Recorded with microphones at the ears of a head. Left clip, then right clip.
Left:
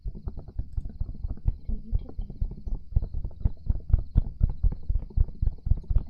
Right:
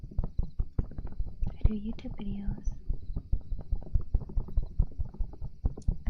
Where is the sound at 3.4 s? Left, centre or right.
Left.